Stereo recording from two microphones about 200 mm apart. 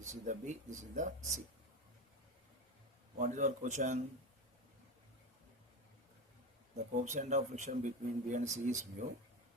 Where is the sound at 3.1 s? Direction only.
40° right (ahead or behind).